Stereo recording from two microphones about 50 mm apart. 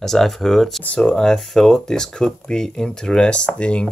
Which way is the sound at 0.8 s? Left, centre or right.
Left.